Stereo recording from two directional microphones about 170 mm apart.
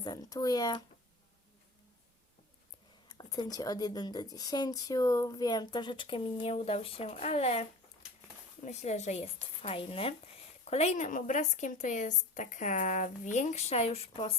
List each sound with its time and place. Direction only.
0.0 s speech: 20° left (ahead or behind)
3.1 s a woman's voice: 25° left (ahead or behind)